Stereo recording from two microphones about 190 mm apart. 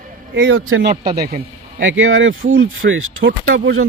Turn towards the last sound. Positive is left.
turn(degrees=-90)